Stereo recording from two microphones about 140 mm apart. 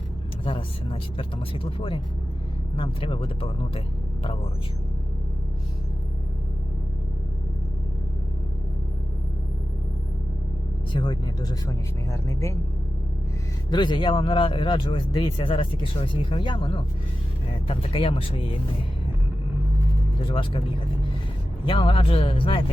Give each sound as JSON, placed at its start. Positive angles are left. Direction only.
{"t": 0.4, "sound": "speech", "side_deg": 40}
{"t": 11.0, "sound": "speech", "side_deg": 30}
{"t": 13.7, "sound": "speech", "side_deg": 35}
{"t": 20.2, "sound": "speech", "side_deg": 40}
{"t": 21.7, "sound": "speech", "side_deg": 40}